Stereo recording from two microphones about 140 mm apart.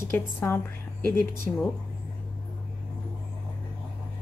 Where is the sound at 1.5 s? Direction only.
5° right (ahead or behind).